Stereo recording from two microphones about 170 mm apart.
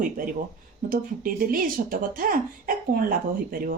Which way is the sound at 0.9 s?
55° right (ahead or behind).